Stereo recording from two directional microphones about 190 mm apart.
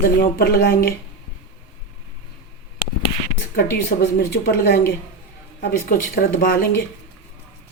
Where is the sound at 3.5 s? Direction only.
55° left (ahead or behind).